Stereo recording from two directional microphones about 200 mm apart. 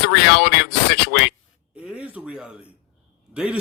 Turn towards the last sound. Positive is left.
turn(degrees=-5)  # may be behind; listen again after turning